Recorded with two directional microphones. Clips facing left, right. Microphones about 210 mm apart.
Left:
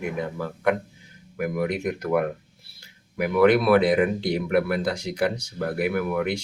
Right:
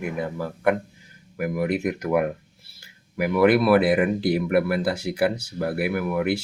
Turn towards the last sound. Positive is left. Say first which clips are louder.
# right 1 dB
turn(degrees=-5)  # may be behind; listen again after turning